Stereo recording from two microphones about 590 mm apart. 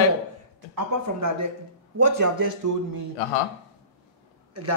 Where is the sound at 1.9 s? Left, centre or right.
Right.